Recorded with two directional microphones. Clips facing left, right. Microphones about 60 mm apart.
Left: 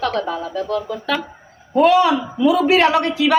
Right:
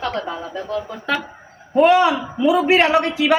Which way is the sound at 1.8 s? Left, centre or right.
Right.